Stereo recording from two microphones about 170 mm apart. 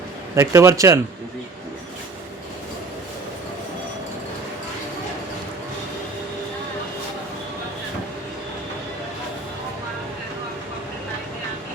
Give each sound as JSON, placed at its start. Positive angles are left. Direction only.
{"t": 0.3, "sound": "a man's voice", "side_deg": -15}